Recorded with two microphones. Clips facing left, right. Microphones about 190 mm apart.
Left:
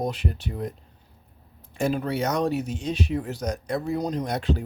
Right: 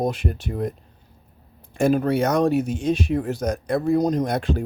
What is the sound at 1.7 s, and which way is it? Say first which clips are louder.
Speech: right 6 dB; 50° right (ahead or behind).